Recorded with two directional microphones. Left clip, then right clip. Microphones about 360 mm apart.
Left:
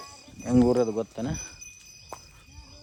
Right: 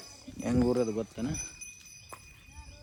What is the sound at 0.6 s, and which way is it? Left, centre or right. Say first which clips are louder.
Speech: left 5 dB; left.